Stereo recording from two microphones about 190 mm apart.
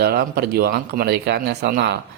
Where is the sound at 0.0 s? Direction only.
55° right (ahead or behind).